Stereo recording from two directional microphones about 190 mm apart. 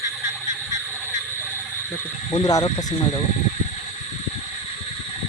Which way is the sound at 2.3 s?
20° left (ahead or behind).